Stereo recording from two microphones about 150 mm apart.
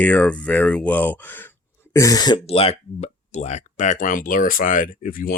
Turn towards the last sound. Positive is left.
turn(degrees=70)  # may be behind; listen again after turning